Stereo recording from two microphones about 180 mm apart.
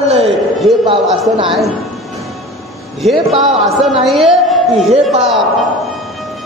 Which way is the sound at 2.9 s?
Centre (ahead or behind).